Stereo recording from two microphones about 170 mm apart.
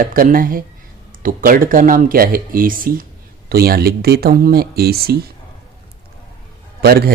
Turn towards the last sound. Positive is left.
turn(degrees=-65)  # may be behind; listen again after turning